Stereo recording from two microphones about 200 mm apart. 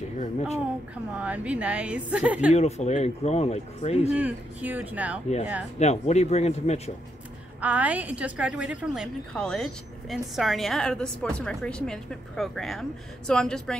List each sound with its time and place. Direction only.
1.1 s a woman's voice: 5° right (ahead or behind)
2.5 s speech: 35° left (ahead or behind)
4.1 s a woman's voice: 5° right (ahead or behind)
5.8 s speech: 35° left (ahead or behind)
7.6 s a woman's voice: 5° right (ahead or behind)